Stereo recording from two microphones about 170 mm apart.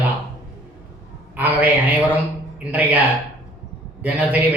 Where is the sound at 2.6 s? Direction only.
10° right (ahead or behind).